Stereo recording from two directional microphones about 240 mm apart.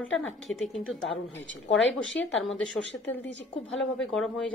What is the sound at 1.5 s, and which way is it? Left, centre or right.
Speech, left.